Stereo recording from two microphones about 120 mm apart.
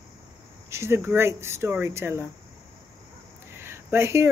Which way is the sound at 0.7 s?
20° right (ahead or behind).